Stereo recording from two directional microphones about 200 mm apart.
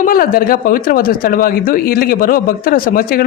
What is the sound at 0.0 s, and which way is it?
Speech, 45° left (ahead or behind).